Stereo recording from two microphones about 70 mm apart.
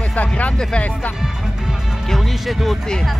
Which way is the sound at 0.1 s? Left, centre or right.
Left.